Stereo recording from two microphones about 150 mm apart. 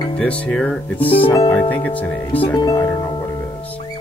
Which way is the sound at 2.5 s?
25° left (ahead or behind).